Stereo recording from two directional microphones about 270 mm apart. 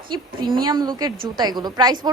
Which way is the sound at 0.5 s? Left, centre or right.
Centre.